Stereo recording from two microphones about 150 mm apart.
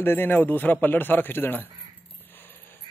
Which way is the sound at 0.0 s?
15° left (ahead or behind).